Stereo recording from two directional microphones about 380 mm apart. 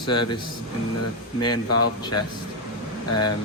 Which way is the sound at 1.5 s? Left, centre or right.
Left.